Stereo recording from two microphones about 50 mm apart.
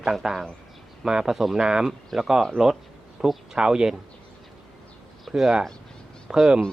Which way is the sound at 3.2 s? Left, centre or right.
Centre.